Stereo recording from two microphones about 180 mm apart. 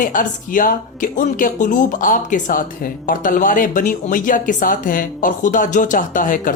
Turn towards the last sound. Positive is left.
turn(degrees=50)  # may be behind; listen again after turning